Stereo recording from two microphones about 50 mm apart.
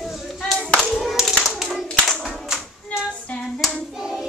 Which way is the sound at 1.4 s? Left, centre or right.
Centre.